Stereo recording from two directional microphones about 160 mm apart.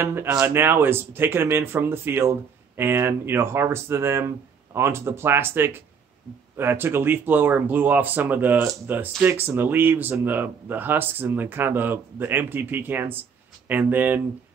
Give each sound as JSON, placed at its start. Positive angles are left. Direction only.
{"t": 0.0, "sound": "speech", "side_deg": -15}